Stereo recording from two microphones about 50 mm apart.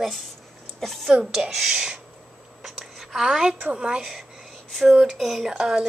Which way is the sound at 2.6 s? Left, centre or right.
Centre.